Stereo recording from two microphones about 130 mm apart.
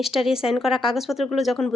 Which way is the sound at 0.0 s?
5° right (ahead or behind).